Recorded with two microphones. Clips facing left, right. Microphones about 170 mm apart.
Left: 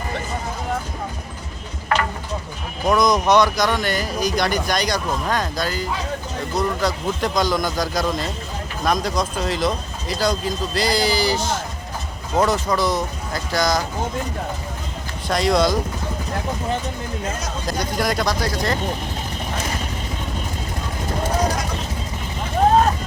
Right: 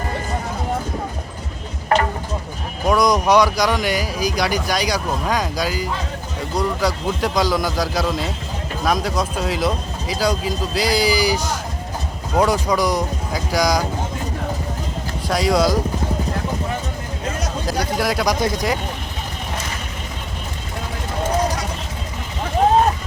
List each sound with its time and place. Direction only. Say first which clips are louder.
2.8 s speech: right 1 dB; 10° right (ahead or behind)
12.4 s speech: right 2 dB; 10° right (ahead or behind)
15.3 s speech: right 1 dB; 5° right (ahead or behind)
17.7 s speech: right 1 dB; 5° right (ahead or behind)
18.3 s speech: right 2 dB; 20° right (ahead or behind)